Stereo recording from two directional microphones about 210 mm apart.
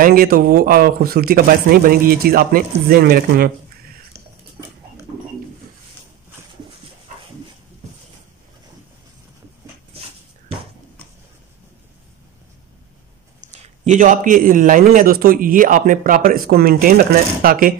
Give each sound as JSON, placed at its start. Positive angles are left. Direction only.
{"t": 0.0, "sound": "speech", "side_deg": -45}
{"t": 13.5, "sound": "a man's voice", "side_deg": -35}